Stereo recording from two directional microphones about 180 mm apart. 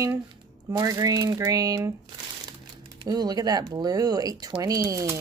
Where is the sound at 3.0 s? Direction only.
20° right (ahead or behind).